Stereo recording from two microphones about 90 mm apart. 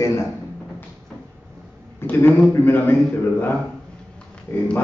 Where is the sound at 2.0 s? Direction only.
25° left (ahead or behind).